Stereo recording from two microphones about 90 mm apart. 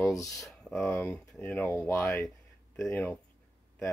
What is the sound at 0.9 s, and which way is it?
Speech, 25° left (ahead or behind).